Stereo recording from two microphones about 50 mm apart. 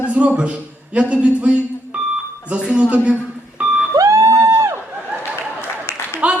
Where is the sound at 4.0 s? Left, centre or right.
Right.